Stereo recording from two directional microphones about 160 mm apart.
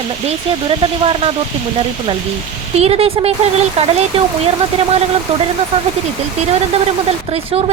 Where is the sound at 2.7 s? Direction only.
40° right (ahead or behind).